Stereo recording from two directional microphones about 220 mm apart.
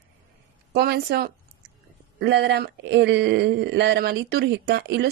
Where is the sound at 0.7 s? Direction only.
45° right (ahead or behind).